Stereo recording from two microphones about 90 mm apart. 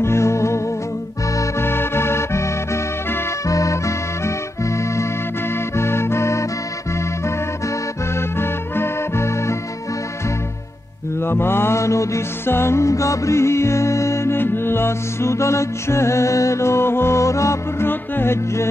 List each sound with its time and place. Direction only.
0.0 s music: 30° left (ahead or behind)
11.1 s mantra: 25° left (ahead or behind)